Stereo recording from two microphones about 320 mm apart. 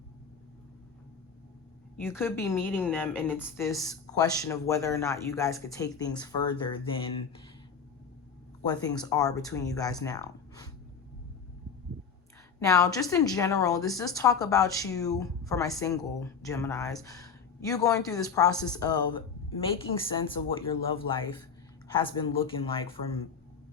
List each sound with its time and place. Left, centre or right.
2.0 s a woman's voice: centre
8.6 s a woman's voice: centre
12.5 s a woman's voice: centre